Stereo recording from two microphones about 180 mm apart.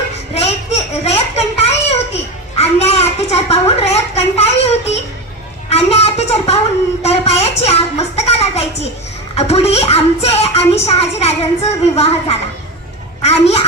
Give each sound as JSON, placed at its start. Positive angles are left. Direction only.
{"t": 0.3, "sound": "a sound", "side_deg": 35}
{"t": 7.6, "sound": "music", "side_deg": 35}
{"t": 9.3, "sound": "a woman's voice", "side_deg": 35}